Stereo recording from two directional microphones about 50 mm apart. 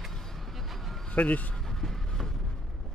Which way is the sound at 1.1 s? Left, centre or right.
Left.